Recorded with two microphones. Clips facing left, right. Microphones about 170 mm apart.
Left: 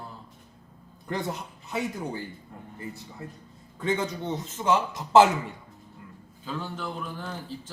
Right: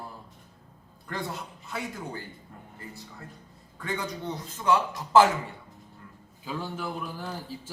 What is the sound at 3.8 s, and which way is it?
A man's voice, 20° left (ahead or behind).